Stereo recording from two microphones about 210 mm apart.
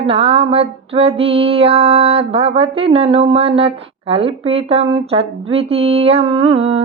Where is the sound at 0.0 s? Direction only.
25° right (ahead or behind).